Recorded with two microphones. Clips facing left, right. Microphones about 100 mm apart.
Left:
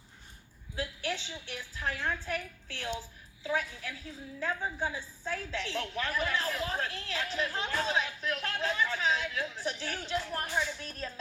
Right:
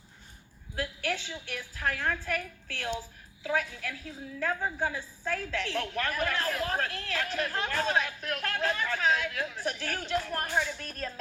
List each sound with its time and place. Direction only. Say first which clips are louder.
0.8 s a woman's voice: right 3 dB; 50° right (ahead or behind)
3.4 s a woman's voice: right 2 dB; 50° right (ahead or behind)